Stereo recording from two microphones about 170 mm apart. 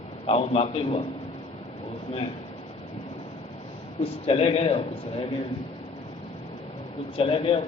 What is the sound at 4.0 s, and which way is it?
A man's voice, 35° left (ahead or behind).